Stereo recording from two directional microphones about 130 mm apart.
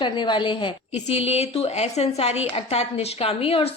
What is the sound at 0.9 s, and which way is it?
A woman's voice, 55° left (ahead or behind).